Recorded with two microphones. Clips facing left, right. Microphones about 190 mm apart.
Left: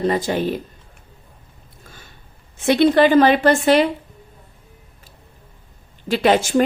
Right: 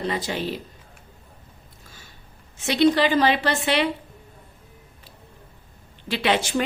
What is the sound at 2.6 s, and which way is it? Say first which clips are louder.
Speech: left 5 dB; 55° left (ahead or behind).